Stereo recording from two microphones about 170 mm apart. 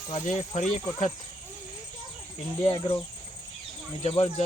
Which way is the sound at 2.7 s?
35° left (ahead or behind).